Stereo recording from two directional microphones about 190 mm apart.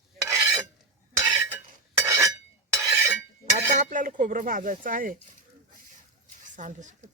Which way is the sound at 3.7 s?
40° right (ahead or behind).